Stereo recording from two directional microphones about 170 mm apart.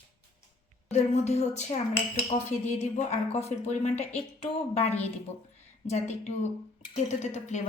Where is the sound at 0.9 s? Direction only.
40° left (ahead or behind).